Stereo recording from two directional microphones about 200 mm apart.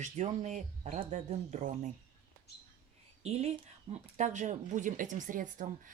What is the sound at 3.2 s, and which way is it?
Speech, 30° right (ahead or behind).